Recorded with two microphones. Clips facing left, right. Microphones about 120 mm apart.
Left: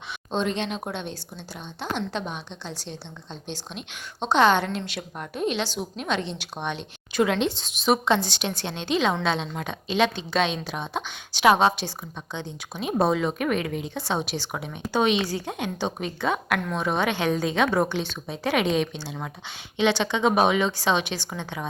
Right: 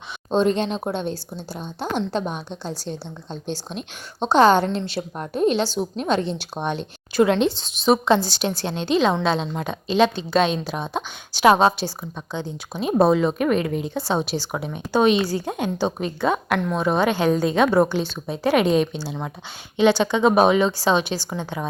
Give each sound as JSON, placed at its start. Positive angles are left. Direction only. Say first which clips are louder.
{"t": 0.3, "sound": "a woman's voice", "louder": "right 7 dB", "side_deg": -40}